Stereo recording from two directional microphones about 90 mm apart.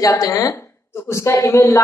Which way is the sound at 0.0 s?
35° left (ahead or behind).